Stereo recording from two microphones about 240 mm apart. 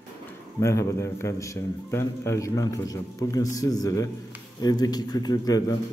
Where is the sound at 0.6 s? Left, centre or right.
Centre.